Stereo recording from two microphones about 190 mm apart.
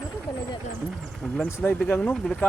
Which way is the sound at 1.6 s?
10° left (ahead or behind).